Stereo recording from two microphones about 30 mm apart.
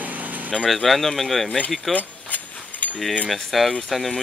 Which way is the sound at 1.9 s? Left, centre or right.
Left.